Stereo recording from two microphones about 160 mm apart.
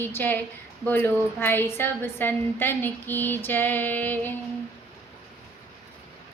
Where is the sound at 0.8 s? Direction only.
10° left (ahead or behind).